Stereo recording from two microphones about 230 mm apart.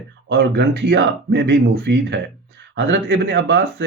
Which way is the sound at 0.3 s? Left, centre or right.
Right.